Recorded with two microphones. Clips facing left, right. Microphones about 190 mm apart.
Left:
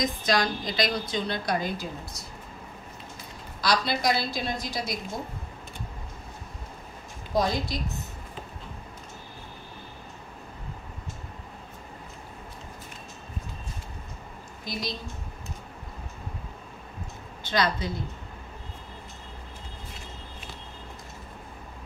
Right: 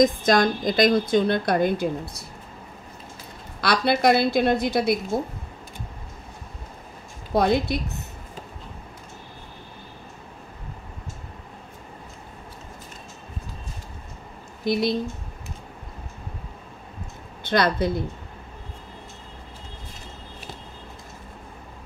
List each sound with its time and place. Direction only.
0.0 s a woman's voice: 50° right (ahead or behind)
3.6 s a woman's voice: 60° right (ahead or behind)
7.3 s a woman's voice: 60° right (ahead or behind)
14.6 s speech: 60° right (ahead or behind)
17.4 s a woman's voice: 55° right (ahead or behind)